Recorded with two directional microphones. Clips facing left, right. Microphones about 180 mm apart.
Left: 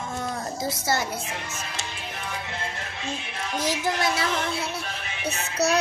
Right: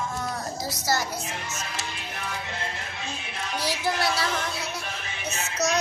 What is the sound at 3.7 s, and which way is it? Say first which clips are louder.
Speech: left 1 dB; 20° left (ahead or behind).